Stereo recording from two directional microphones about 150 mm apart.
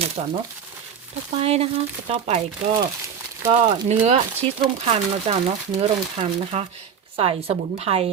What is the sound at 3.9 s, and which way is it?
Speech, 45° right (ahead or behind).